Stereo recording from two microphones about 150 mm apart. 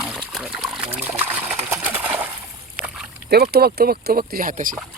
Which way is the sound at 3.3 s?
90° right.